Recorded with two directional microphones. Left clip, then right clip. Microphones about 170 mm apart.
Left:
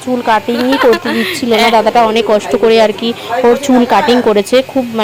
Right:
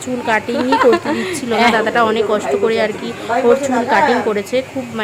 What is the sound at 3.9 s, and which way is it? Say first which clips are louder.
A woman's voice: left 3 dB; 35° left (ahead or behind).